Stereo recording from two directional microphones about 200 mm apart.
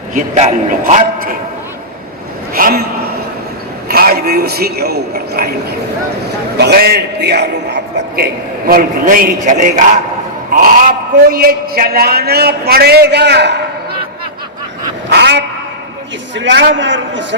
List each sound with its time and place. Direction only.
0.1 s a man's voice: 35° right (ahead or behind)
2.6 s a man's voice: 45° right (ahead or behind)
3.8 s a man's voice: 50° right (ahead or behind)
6.6 s a man's voice: 55° right (ahead or behind); by 10.0 s 40° right (ahead or behind)
11.3 s a man's voice: 50° right (ahead or behind)
15.1 s a sound: 60° right (ahead or behind)
16.3 s a man's voice: 65° right (ahead or behind)